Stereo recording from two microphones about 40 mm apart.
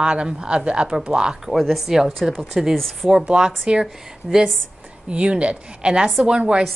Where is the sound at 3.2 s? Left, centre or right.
Right.